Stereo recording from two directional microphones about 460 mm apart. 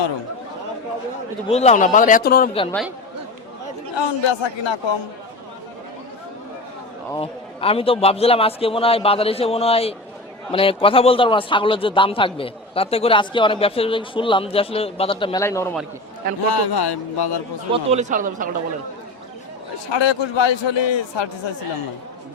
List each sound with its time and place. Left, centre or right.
1.5 s a man's voice: centre
3.9 s a man's voice: left
7.1 s a man's voice: centre
16.5 s speech: left
17.7 s a man's voice: centre
19.9 s a man's voice: left